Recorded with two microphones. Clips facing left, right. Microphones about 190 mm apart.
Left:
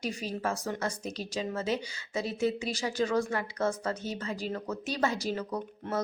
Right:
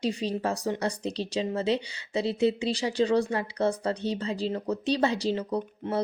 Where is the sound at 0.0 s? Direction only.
30° right (ahead or behind).